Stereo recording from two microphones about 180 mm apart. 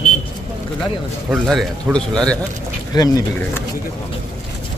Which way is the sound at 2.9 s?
20° left (ahead or behind).